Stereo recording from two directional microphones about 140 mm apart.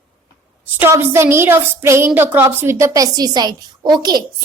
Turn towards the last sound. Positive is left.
turn(degrees=-30)  # may be behind; listen again after turning